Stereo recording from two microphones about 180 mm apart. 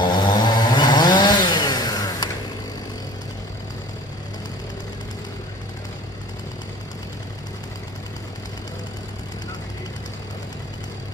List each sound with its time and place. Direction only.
0.0 s chainsaw: 25° left (ahead or behind)